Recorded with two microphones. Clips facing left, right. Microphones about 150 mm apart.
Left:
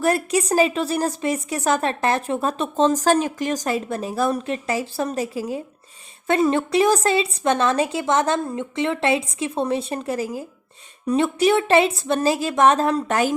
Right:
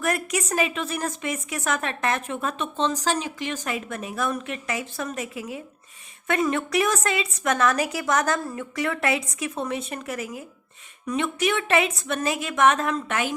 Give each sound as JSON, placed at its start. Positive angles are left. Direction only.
{"t": 0.0, "sound": "a woman's voice", "side_deg": 30}